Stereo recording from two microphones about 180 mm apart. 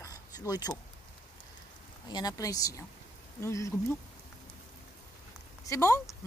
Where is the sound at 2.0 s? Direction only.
20° left (ahead or behind).